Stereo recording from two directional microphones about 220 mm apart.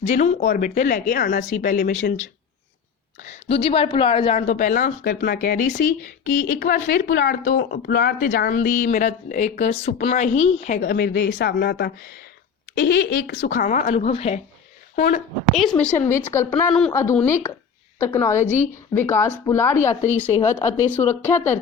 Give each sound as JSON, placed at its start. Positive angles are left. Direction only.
{"t": 0.0, "sound": "speech", "side_deg": 30}
{"t": 3.2, "sound": "a woman's voice", "side_deg": 25}
{"t": 15.8, "sound": "speech", "side_deg": 10}